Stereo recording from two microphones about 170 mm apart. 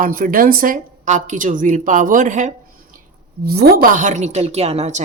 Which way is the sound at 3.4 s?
60° right (ahead or behind).